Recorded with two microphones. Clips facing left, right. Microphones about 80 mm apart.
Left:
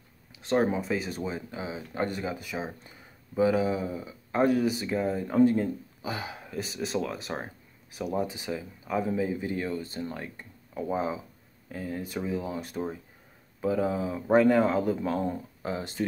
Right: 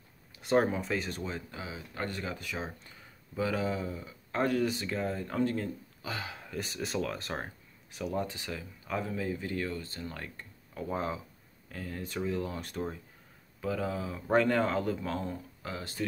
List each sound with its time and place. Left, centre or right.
0.4 s a sound: centre
0.7 s speech: centre
6.5 s speech: centre
13.6 s speech: left